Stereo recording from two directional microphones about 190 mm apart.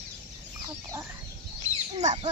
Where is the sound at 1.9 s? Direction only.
35° right (ahead or behind).